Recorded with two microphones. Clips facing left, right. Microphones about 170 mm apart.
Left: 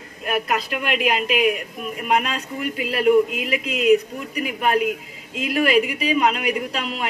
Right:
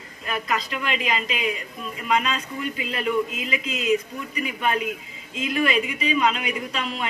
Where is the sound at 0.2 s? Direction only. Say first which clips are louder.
Left 4 dB; 55° left (ahead or behind).